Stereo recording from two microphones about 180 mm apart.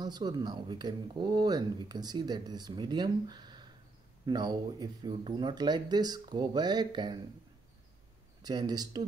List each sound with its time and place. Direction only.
0.0 s speech: 25° right (ahead or behind)
8.4 s speech: 20° right (ahead or behind)